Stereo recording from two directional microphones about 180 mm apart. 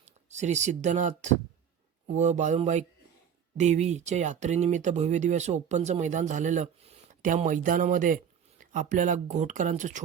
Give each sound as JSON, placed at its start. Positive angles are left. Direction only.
{"t": 0.0, "sound": "speech", "side_deg": -40}